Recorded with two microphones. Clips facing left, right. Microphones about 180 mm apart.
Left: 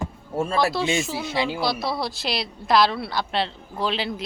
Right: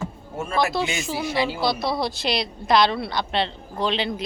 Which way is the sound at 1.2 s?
20° left (ahead or behind).